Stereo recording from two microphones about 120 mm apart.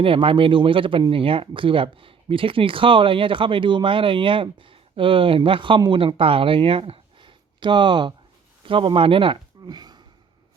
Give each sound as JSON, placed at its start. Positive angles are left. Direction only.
{"t": 0.0, "sound": "speech", "side_deg": -50}